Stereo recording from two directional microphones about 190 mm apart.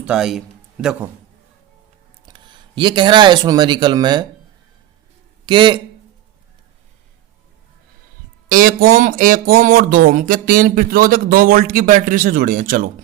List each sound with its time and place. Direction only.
0.0 s a man's voice: 5° right (ahead or behind)
2.2 s speech: 25° right (ahead or behind)
5.5 s speech: 25° right (ahead or behind)
8.4 s speech: 45° right (ahead or behind)